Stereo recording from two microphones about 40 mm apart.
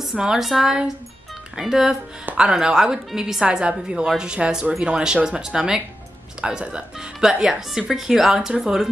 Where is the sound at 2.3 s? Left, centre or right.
Right.